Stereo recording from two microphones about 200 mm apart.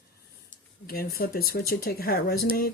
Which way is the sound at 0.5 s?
50° left (ahead or behind).